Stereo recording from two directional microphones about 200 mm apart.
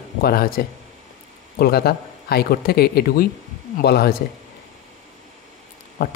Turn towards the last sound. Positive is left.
turn(degrees=50)  # may be behind; listen again after turning